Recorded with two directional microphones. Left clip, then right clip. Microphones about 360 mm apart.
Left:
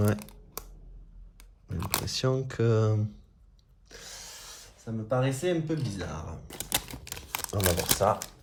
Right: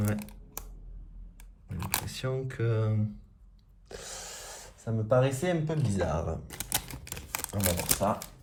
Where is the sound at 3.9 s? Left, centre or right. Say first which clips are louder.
Right 3 dB; centre.